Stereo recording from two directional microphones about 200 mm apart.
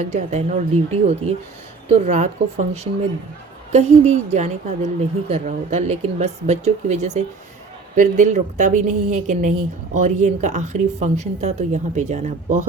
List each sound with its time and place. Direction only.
0.0 s a woman's voice: 35° right (ahead or behind)